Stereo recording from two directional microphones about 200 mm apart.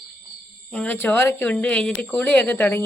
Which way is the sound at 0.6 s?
5° left (ahead or behind).